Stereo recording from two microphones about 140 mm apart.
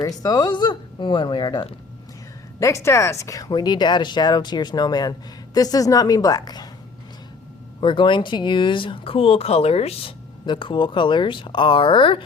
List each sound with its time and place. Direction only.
0.2 s speech: 25° left (ahead or behind)
7.8 s speech: 35° left (ahead or behind)